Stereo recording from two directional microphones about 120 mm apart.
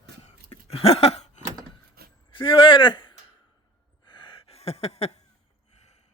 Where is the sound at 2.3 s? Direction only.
45° left (ahead or behind).